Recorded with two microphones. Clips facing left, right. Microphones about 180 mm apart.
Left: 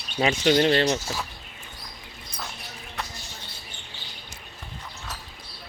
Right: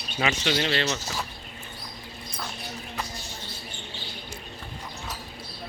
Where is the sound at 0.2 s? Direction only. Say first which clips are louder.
Left 6 dB; 40° left (ahead or behind).